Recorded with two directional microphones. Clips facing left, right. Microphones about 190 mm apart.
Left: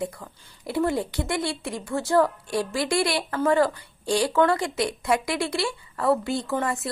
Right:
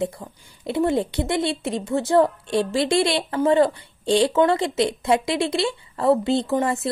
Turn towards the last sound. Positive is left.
turn(degrees=-25)  # may be behind; listen again after turning